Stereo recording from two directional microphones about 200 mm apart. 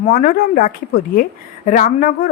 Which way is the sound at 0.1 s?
45° left (ahead or behind).